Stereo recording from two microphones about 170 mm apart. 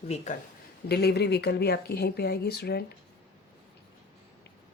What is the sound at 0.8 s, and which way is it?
Speech, 75° left (ahead or behind).